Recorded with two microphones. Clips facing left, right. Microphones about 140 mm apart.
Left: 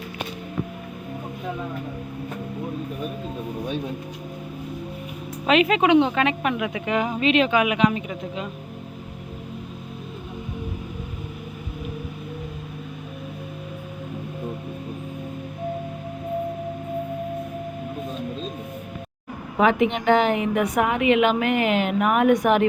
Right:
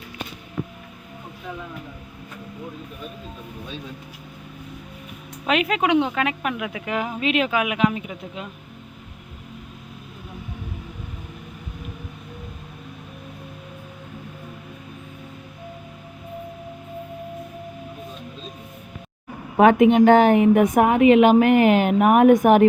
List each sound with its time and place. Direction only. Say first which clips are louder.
5.5 s a woman's voice: left 3 dB; centre (ahead or behind)
19.5 s a woman's voice: right 6 dB; 45° right (ahead or behind)